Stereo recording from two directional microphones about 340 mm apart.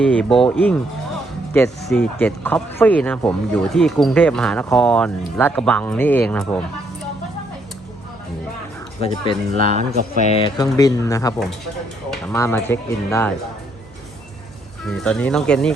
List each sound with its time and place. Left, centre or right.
0.0 s speech: centre
9.0 s speech: centre
9.6 s speech: right
10.4 s speech: centre
14.8 s speech: centre